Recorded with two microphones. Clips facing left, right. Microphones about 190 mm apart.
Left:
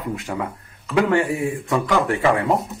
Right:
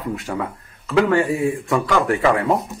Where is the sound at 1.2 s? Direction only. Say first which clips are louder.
Right 3 dB; 15° right (ahead or behind).